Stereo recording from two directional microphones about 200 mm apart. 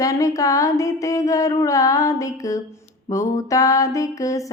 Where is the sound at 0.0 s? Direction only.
15° left (ahead or behind).